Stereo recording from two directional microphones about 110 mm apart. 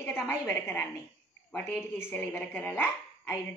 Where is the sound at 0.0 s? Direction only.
20° left (ahead or behind).